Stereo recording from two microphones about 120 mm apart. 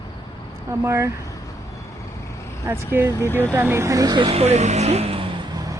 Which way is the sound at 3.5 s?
20° right (ahead or behind).